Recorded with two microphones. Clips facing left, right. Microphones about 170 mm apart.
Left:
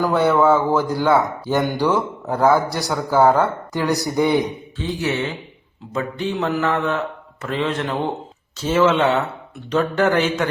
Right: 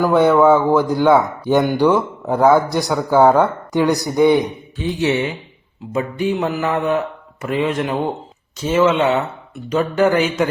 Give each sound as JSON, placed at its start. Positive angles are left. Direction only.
{"t": 0.0, "sound": "speech", "side_deg": -15}
{"t": 5.9, "sound": "speech", "side_deg": -10}